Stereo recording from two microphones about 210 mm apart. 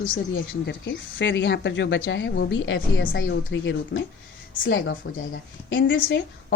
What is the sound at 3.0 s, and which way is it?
Speech, 50° left (ahead or behind).